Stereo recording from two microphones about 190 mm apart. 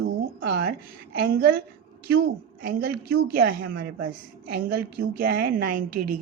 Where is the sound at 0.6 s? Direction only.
55° right (ahead or behind).